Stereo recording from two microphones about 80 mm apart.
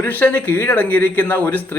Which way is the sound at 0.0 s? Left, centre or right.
Left.